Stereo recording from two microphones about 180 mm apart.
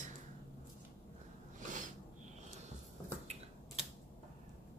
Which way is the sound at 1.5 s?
45° right (ahead or behind).